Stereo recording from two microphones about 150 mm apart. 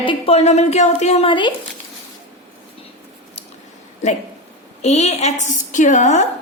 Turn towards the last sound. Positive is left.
turn(degrees=50)  # may be behind; listen again after turning